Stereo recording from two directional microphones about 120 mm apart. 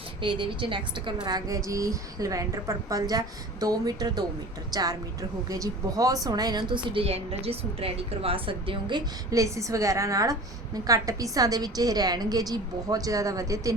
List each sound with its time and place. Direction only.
0.2 s a woman's voice: 45° right (ahead or behind); by 13.7 s 30° right (ahead or behind)